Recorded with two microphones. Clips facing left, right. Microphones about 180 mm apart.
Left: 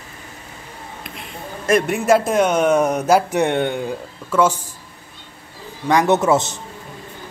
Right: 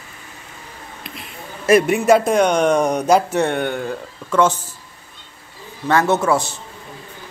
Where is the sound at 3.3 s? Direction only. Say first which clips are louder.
Left 1 dB; 15° left (ahead or behind).